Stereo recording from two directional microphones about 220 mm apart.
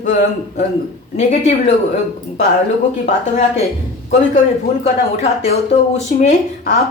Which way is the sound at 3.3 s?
30° left (ahead or behind).